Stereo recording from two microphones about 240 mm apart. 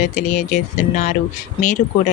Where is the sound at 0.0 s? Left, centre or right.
Left.